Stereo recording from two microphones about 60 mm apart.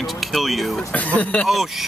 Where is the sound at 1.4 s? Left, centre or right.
Centre.